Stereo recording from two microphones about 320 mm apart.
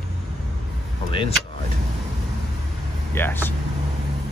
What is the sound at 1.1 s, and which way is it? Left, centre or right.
Speech, centre.